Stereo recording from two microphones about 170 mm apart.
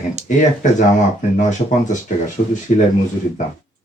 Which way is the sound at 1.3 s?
45° left (ahead or behind).